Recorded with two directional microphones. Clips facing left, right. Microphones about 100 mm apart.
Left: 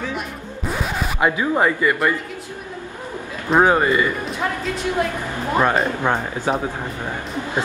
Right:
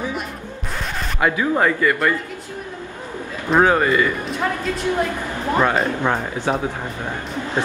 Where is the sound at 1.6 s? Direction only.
15° left (ahead or behind).